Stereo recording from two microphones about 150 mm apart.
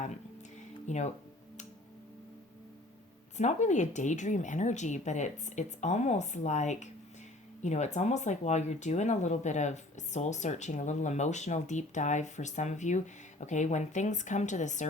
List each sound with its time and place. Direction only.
0.9 s speech: 50° left (ahead or behind)
3.3 s speech: 50° left (ahead or behind)